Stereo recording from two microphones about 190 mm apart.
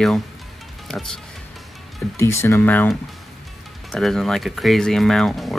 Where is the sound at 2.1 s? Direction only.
15° left (ahead or behind).